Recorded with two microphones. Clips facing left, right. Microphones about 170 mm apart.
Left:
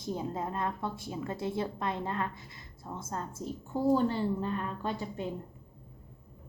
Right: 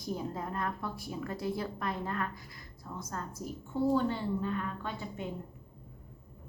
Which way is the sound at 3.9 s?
35° left (ahead or behind).